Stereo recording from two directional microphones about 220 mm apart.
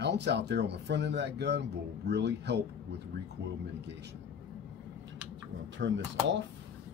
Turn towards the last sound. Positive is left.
turn(degrees=-55)  # may be behind; listen again after turning